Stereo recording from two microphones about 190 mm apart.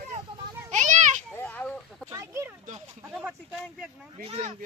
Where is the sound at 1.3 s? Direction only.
10° left (ahead or behind).